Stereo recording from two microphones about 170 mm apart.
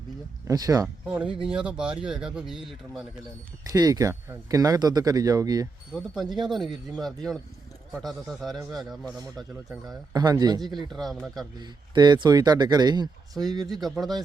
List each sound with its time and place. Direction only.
0.4 s speech: 20° right (ahead or behind)
1.0 s speech: 5° right (ahead or behind)
3.7 s speech: 20° right (ahead or behind)
5.9 s speech: centre (ahead or behind)
8.0 s speech: centre (ahead or behind)
10.1 s speech: 20° right (ahead or behind)
10.9 s speech: centre (ahead or behind)
11.6 s speech: 25° right (ahead or behind)
13.8 s speech: centre (ahead or behind)